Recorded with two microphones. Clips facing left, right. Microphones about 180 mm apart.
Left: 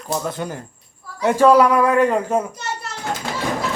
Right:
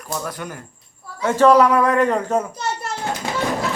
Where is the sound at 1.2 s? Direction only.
15° left (ahead or behind).